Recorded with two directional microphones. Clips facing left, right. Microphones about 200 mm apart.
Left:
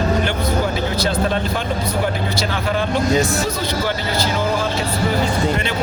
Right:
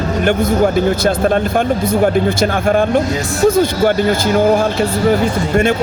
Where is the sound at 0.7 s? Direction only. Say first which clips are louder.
Right 6 dB; 50° right (ahead or behind).